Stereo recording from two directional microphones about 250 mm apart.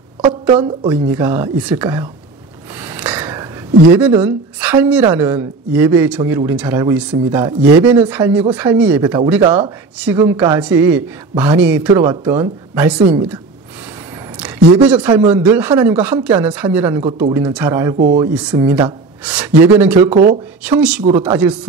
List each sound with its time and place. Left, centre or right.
0.2 s a woman's voice: right
1.0 s a man's voice: centre
2.8 s a sound: centre
3.9 s a man's voice: centre
12.0 s a man's voice: centre
14.4 s a man's voice: centre
17.9 s speech: right
18.2 s a man's voice: centre
20.1 s speech: right
21.1 s a man's voice: centre